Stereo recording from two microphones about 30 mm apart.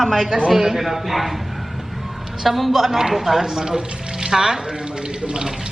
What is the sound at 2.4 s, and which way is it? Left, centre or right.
A man's voice, centre.